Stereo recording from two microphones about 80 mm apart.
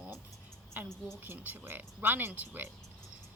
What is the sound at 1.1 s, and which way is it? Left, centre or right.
A woman's voice, right.